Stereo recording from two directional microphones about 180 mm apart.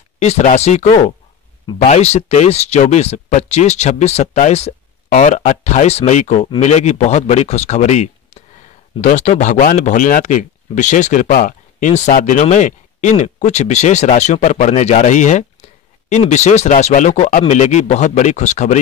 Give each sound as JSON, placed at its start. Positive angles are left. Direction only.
{"t": 0.2, "sound": "speech", "side_deg": 40}